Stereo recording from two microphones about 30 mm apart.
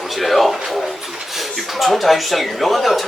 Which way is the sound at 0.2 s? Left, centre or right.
Centre.